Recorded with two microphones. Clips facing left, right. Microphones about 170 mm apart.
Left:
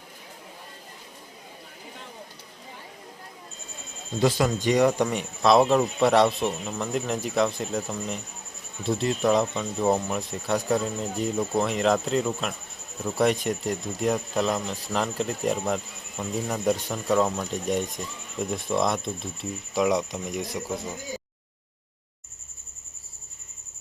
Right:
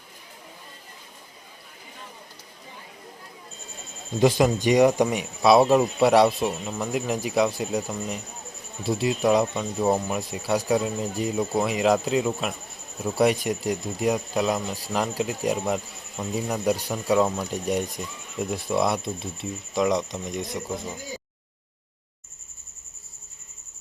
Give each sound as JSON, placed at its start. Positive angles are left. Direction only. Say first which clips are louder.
{"t": 4.2, "sound": "speech", "louder": "right 3 dB", "side_deg": -15}